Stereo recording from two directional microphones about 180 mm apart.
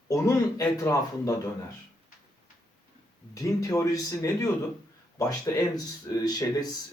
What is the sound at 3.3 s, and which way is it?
Speech, 20° left (ahead or behind).